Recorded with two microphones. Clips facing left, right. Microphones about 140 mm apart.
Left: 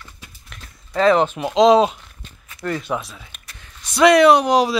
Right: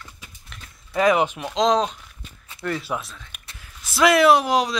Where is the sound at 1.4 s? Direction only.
5° left (ahead or behind).